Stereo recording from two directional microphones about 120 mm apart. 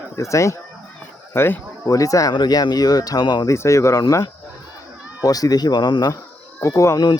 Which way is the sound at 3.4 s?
25° left (ahead or behind).